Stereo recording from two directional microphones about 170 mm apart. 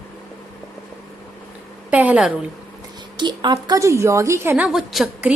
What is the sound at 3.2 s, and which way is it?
A woman's voice, 25° right (ahead or behind).